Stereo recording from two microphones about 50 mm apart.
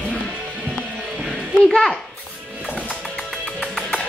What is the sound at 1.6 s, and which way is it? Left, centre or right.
Speech, centre.